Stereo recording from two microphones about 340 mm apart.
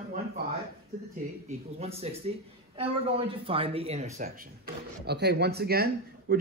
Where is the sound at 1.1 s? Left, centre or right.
Centre.